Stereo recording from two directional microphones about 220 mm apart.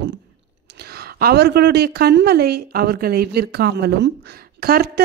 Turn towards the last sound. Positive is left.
turn(degrees=-45)  # may be behind; listen again after turning